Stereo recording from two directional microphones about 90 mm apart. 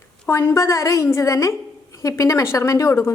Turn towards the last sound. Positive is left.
turn(degrees=30)  # may be behind; listen again after turning